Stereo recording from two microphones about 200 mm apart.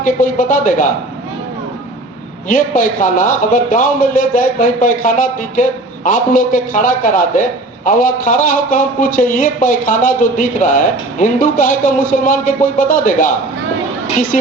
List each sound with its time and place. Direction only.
0.0 s a man's voice: 40° left (ahead or behind)
2.5 s a man's voice: 40° left (ahead or behind)